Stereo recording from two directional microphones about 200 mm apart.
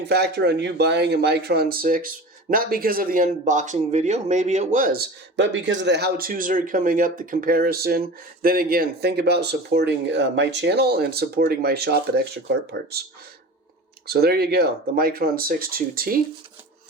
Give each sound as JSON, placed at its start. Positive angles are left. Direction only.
{"t": 0.0, "sound": "speech", "side_deg": -55}
{"t": 14.1, "sound": "speech", "side_deg": -50}